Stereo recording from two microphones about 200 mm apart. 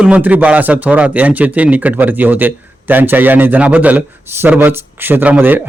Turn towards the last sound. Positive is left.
turn(degrees=-10)  # may be behind; listen again after turning